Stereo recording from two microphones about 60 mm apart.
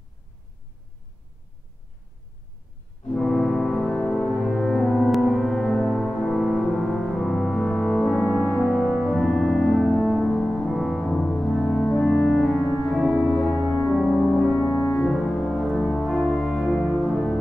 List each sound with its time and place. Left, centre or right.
3.2 s music: centre
4.2 s music: centre
6.3 s music: centre
13.7 s music: centre
14.3 s music: centre
14.8 s french horn: centre
15.6 s music: centre